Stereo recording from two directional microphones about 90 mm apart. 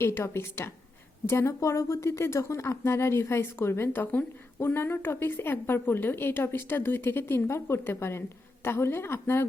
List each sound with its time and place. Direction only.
0.0 s speech: 25° left (ahead or behind)